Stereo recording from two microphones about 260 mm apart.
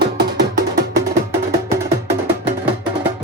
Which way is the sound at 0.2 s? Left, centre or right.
Right.